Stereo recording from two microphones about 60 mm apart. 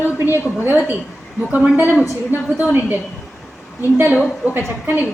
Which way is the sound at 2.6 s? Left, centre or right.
Right.